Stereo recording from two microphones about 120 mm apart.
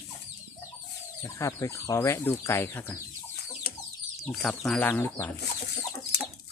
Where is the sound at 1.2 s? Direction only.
25° left (ahead or behind).